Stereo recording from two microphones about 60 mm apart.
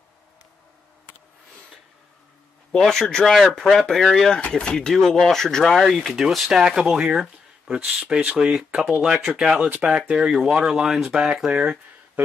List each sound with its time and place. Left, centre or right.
2.8 s speech: centre
4.4 s speech: centre
9.7 s speech: right
9.9 s speech: centre